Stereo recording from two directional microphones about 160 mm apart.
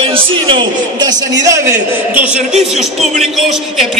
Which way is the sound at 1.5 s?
20° right (ahead or behind).